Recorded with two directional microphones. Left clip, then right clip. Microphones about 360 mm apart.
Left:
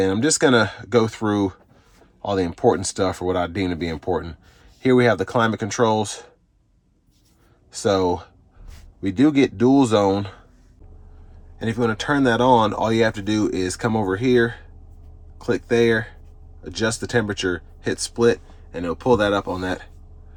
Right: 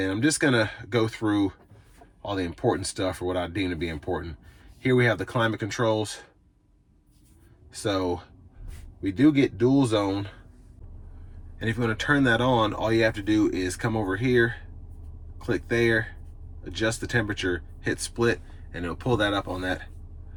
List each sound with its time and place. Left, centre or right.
0.1 s speech: centre
7.7 s speech: centre
11.6 s speech: centre